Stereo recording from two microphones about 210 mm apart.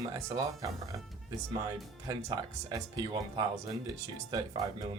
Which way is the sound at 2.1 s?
20° right (ahead or behind).